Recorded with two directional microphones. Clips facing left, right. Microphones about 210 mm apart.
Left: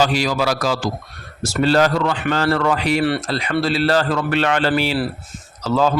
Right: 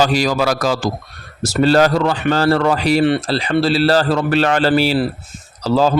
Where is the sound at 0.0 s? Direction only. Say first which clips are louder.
Right 3 dB; 40° right (ahead or behind).